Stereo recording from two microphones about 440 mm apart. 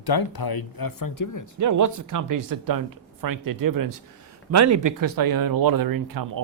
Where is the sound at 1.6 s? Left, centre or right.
Right.